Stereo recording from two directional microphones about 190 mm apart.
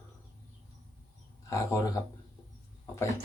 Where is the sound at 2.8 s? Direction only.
15° left (ahead or behind).